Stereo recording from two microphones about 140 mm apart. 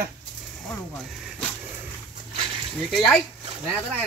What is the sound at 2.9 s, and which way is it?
Speech, centre (ahead or behind).